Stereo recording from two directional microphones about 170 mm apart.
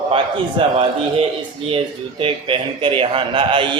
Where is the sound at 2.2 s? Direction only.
30° right (ahead or behind).